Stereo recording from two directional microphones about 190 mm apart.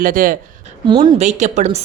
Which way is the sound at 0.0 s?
45° right (ahead or behind).